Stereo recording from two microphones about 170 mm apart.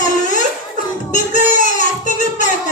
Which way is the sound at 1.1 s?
45° left (ahead or behind).